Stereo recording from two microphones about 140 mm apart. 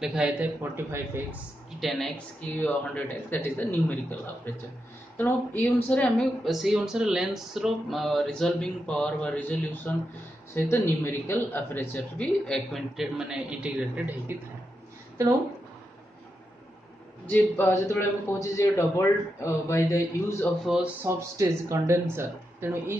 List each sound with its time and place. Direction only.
0.0 s speech: 5° right (ahead or behind)
1.8 s a woman's voice: centre (ahead or behind)
17.3 s a man's voice: 15° left (ahead or behind)
20.6 s a man's voice: 5° right (ahead or behind)
21.0 s speech: 20° right (ahead or behind)